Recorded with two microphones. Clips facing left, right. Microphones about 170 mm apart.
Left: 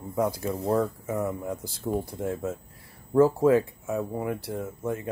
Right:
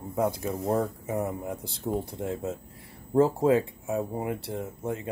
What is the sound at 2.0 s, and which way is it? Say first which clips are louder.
Speech: left 1 dB; 25° left (ahead or behind).